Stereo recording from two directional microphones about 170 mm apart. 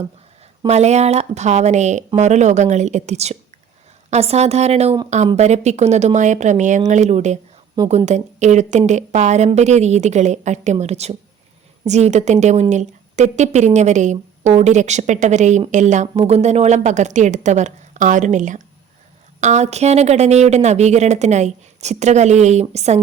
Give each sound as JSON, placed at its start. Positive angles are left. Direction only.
{"t": 0.7, "sound": "a woman's voice", "side_deg": -40}